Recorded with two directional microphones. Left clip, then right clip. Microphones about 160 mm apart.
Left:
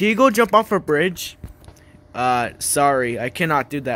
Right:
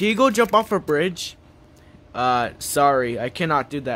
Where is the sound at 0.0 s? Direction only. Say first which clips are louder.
Left 2 dB; 10° left (ahead or behind).